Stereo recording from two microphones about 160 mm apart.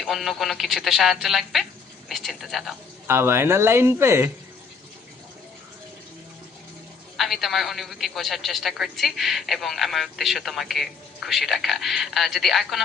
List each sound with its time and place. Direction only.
0.0 s a man's voice: centre (ahead or behind)
3.1 s speech: 15° right (ahead or behind)
7.2 s a man's voice: centre (ahead or behind)